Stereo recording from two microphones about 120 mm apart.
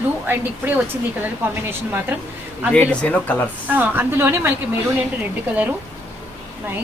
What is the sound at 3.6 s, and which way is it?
Speech, 15° right (ahead or behind).